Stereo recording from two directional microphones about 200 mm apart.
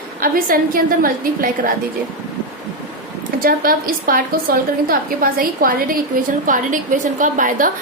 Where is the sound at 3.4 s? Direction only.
45° right (ahead or behind).